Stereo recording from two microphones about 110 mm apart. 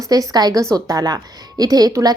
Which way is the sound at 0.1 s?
35° right (ahead or behind).